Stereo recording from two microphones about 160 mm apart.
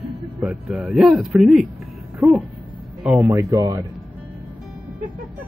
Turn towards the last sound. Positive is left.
turn(degrees=-20)  # may be behind; listen again after turning